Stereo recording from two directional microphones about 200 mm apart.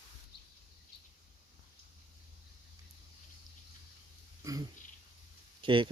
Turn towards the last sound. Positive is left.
turn(degrees=-25)  # may be behind; listen again after turning